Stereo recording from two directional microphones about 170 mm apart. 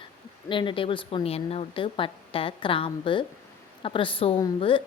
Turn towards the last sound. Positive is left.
turn(degrees=30)  # may be behind; listen again after turning